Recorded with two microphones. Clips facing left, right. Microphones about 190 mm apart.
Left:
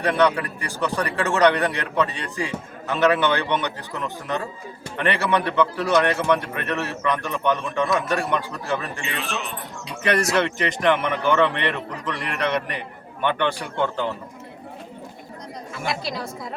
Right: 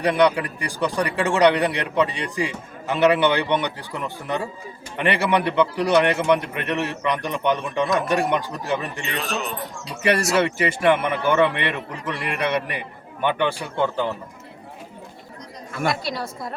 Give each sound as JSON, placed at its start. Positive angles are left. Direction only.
{"t": 0.0, "sound": "a man's voice", "side_deg": -15}
{"t": 9.1, "sound": "speech", "side_deg": -40}
{"t": 10.1, "sound": "a man's voice", "side_deg": -5}
{"t": 15.9, "sound": "a woman's voice", "side_deg": 0}